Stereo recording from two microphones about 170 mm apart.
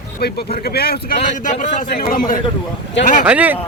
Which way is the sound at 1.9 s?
60° left (ahead or behind).